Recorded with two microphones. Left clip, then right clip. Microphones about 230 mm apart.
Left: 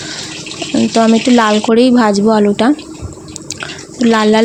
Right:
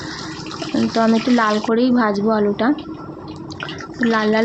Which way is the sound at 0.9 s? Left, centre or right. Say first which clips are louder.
Left 6 dB; left.